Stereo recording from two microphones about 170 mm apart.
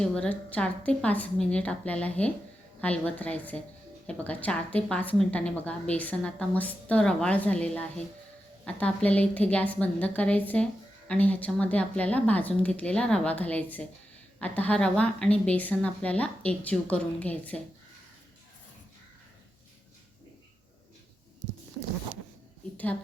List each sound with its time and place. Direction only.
0.0 s a woman's voice: 5° left (ahead or behind)